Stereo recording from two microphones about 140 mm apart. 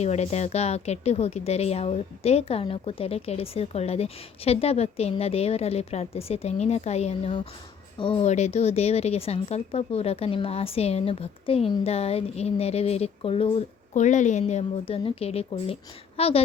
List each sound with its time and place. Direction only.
0.0 s speech: 50° left (ahead or behind)
7.9 s speech: 40° left (ahead or behind)
8.2 s speech: 55° left (ahead or behind)
13.9 s speech: 60° left (ahead or behind); by 16.4 s 45° left (ahead or behind)